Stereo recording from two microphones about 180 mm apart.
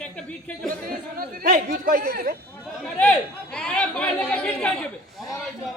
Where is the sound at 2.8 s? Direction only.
5° left (ahead or behind).